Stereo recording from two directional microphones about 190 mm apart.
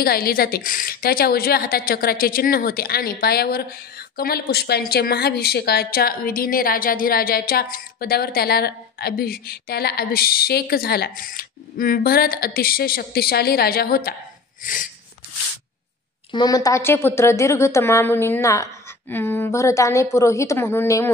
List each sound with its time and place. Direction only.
0.0 s a woman's voice: 50° left (ahead or behind)
14.6 s a sound: 45° left (ahead or behind)
16.3 s a woman's voice: 20° left (ahead or behind)